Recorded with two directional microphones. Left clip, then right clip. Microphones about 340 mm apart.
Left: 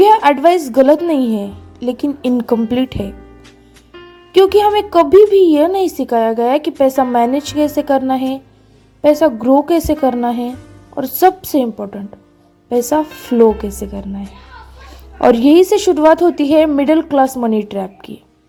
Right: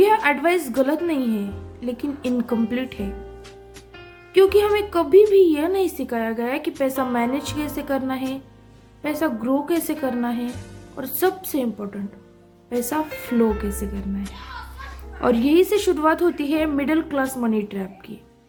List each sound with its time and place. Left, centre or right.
0.0 s a woman's voice: centre
4.4 s a woman's voice: centre
15.2 s a woman's voice: centre